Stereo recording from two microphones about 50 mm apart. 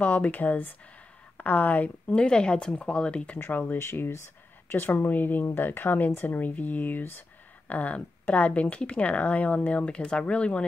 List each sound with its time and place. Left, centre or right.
0.0 s speech: left
2.1 s speech: centre
3.3 s speech: left
3.6 s speech: left
4.7 s speech: left
7.6 s speech: left